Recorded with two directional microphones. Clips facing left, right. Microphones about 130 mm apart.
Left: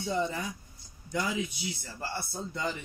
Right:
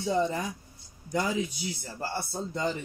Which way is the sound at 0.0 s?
40° right (ahead or behind).